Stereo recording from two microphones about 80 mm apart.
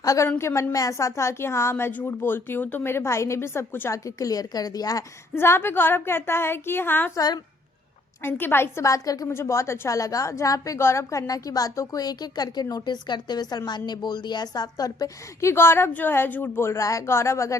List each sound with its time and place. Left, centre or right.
0.0 s a woman's voice: left
0.3 s speech: left
3.9 s a woman's voice: left
5.3 s a woman's voice: left
8.2 s a woman's voice: left
8.8 s a woman's voice: left
9.3 s a woman's voice: left